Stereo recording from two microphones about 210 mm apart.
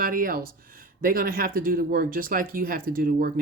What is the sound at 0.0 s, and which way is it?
Speech, 45° right (ahead or behind).